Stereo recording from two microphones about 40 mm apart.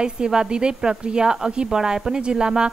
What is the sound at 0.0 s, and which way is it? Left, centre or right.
A woman's voice, centre.